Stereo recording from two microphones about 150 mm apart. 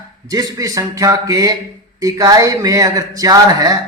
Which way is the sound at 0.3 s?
25° right (ahead or behind).